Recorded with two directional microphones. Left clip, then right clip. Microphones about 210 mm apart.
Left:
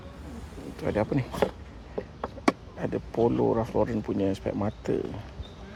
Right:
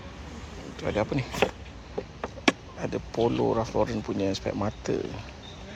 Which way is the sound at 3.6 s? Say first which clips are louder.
Even; 25° left (ahead or behind).